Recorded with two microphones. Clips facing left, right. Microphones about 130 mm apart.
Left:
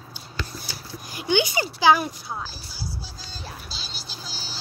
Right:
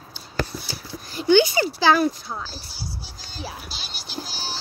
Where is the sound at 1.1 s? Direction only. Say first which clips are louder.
Right 7 dB; 15° left (ahead or behind).